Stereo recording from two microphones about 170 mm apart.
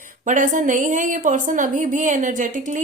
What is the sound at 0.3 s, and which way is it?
A woman's voice, 50° right (ahead or behind).